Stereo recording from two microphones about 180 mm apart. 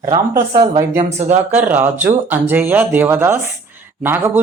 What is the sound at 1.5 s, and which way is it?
A man's voice, 10° right (ahead or behind).